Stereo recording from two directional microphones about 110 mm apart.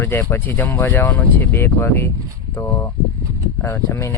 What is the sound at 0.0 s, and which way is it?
Speech, 20° left (ahead or behind).